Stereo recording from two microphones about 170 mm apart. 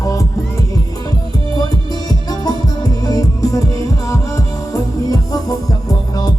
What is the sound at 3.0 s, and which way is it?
Music, 20° left (ahead or behind).